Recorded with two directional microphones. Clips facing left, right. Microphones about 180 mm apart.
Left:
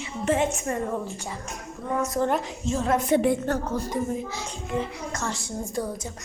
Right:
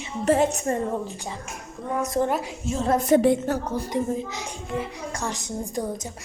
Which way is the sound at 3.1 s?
35° right (ahead or behind).